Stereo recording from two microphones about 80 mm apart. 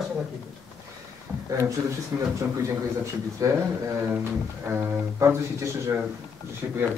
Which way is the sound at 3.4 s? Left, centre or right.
Right.